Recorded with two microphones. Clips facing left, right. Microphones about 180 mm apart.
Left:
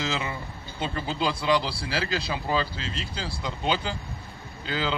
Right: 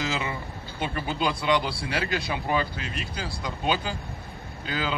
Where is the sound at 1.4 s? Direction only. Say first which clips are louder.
Even; 20° right (ahead or behind).